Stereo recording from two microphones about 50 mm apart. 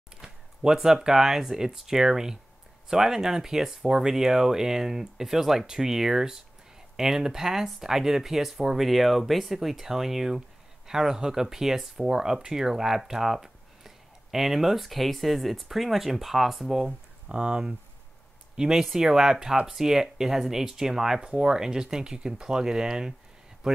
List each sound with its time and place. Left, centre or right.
0.2 s speech: centre
17.3 s a man's voice: centre